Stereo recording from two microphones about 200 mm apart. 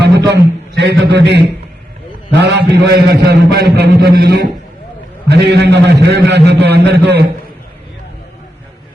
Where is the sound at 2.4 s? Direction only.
55° right (ahead or behind).